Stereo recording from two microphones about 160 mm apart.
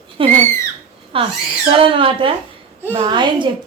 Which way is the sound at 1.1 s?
35° right (ahead or behind).